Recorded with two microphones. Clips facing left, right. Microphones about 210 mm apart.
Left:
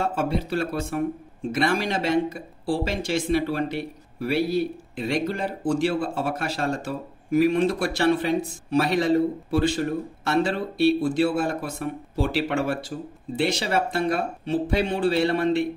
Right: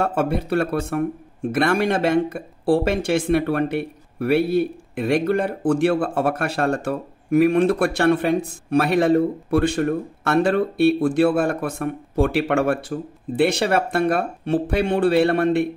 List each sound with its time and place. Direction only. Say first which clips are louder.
0.0 s speech: right 4 dB; 60° right (ahead or behind)